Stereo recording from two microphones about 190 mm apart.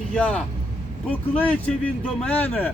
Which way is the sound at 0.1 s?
5° left (ahead or behind).